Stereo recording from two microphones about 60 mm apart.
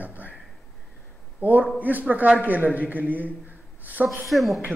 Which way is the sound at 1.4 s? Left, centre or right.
Right.